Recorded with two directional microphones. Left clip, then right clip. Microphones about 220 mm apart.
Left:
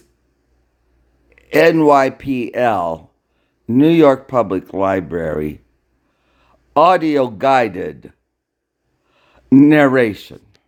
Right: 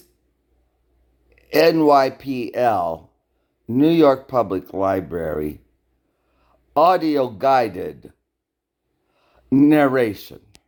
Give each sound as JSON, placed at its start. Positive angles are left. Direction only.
{"t": 1.3, "sound": "speech", "side_deg": 15}
{"t": 9.1, "sound": "speech", "side_deg": 15}